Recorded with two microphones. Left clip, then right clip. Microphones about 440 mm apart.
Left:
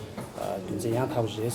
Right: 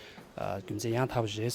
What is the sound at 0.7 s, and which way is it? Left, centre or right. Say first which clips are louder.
Speech: left 3 dB; right.